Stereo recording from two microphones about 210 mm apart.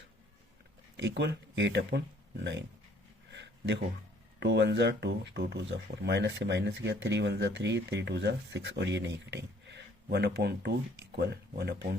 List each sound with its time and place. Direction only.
0.9 s speech: 55° right (ahead or behind)
3.3 s a sound: 55° right (ahead or behind)
4.4 s speech: 55° right (ahead or behind)